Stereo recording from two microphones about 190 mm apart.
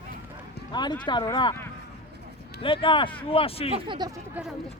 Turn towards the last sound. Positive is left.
turn(degrees=-20)  # may be behind; listen again after turning